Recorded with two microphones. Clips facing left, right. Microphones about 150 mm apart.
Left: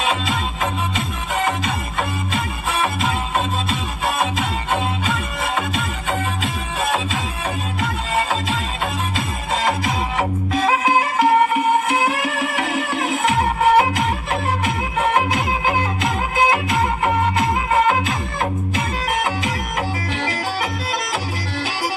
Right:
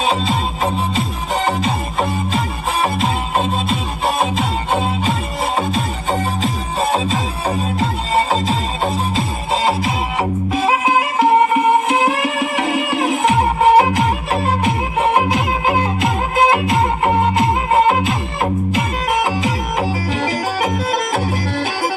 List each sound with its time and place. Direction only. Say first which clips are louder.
0.9 s music: right 3 dB; 35° right (ahead or behind)
11.9 s music: right 3 dB; 30° right (ahead or behind)
19.4 s music: right 5 dB; 35° right (ahead or behind)